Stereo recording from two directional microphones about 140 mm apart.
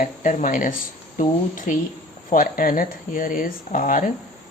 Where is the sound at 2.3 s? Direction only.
85° left.